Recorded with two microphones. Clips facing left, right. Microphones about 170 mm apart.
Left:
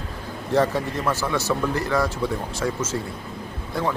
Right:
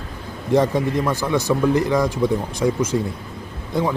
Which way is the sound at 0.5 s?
15° right (ahead or behind).